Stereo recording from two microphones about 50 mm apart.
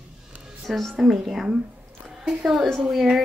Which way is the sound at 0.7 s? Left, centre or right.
Centre.